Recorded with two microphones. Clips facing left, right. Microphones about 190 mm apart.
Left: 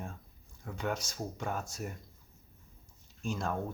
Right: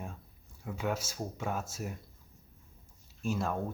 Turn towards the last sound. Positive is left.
turn(degrees=-5)  # may be behind; listen again after turning